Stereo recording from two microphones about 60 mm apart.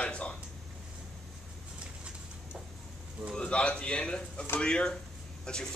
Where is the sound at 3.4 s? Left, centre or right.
Centre.